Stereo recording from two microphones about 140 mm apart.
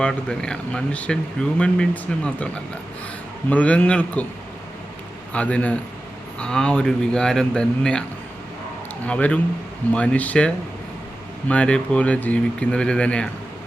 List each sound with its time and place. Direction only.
0.0 s speech: 5° left (ahead or behind)
3.5 s speech: 10° left (ahead or behind)
5.3 s speech: 10° left (ahead or behind)
9.0 s speech: 10° left (ahead or behind)